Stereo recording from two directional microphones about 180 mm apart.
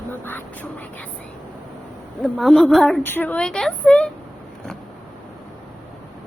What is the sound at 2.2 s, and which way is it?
Speech, centre (ahead or behind).